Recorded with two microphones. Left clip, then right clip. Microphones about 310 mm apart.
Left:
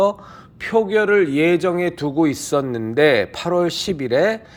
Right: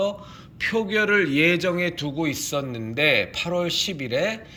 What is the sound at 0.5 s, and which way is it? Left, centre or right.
A man's voice, centre.